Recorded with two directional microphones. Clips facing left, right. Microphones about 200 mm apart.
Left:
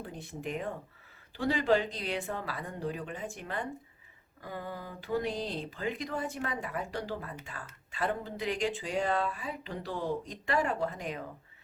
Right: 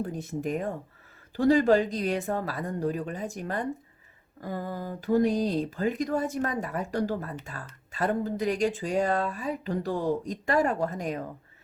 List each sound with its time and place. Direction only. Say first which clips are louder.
0.0 s speech: right 8 dB; 45° right (ahead or behind)